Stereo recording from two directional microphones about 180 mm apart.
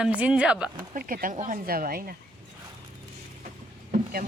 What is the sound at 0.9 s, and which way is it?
Speech, 50° right (ahead or behind).